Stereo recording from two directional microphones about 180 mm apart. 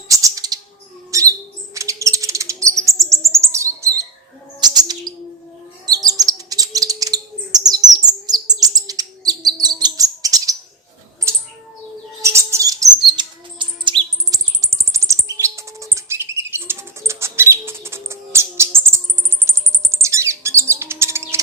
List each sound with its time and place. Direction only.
0.1 s a sound: 20° right (ahead or behind)
1.1 s bird: 20° right (ahead or behind)
12.2 s bird: 15° right (ahead or behind)
19.5 s chirp: 15° right (ahead or behind)